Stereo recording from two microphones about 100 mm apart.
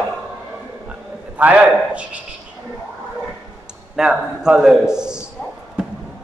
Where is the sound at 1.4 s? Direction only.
15° right (ahead or behind).